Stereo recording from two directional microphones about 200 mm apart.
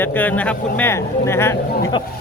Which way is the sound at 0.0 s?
10° left (ahead or behind).